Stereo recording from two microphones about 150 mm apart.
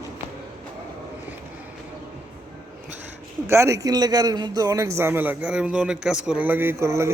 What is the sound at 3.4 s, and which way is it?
A man's voice, 20° right (ahead or behind).